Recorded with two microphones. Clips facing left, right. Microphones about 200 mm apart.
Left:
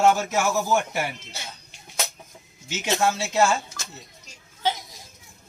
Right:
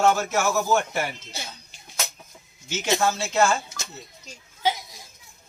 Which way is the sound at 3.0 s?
10° left (ahead or behind).